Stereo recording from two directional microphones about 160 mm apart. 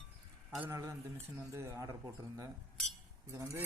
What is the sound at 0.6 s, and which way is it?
Speech, 20° right (ahead or behind).